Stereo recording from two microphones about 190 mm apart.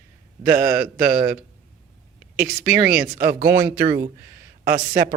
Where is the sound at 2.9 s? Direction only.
50° right (ahead or behind).